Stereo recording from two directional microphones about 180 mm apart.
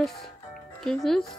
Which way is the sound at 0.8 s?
Centre (ahead or behind).